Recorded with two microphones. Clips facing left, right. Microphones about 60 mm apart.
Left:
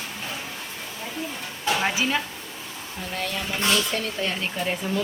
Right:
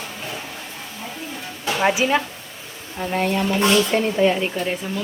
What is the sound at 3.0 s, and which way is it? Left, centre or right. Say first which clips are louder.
Speech: right 9 dB; right.